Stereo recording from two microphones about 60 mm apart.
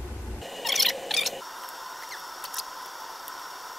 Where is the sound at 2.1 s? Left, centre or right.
Centre.